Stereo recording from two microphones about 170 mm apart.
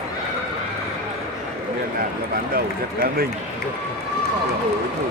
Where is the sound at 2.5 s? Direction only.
60° right (ahead or behind).